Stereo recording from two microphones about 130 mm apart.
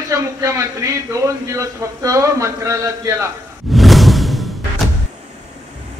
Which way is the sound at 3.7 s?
Centre (ahead or behind).